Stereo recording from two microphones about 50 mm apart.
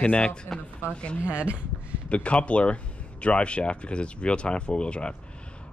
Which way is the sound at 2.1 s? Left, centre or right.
Left.